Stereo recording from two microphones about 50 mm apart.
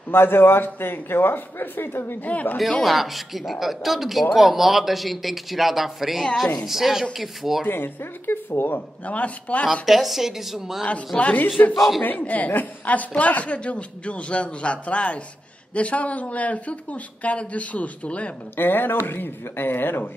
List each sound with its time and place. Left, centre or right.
0.1 s a man's voice: left
2.2 s speech: left
2.8 s speech: centre
7.6 s a man's voice: left
9.0 s a woman's voice: left
9.8 s speech: centre
11.1 s a woman's voice: left
11.7 s speech: centre
12.0 s a woman's voice: left
18.6 s a man's voice: left